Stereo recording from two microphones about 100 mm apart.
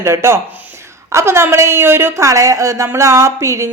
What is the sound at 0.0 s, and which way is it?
Speech, 25° right (ahead or behind).